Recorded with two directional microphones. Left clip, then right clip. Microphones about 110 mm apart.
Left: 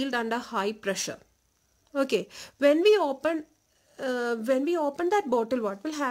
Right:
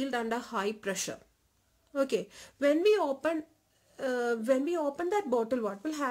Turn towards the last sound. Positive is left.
turn(degrees=50)  # may be behind; listen again after turning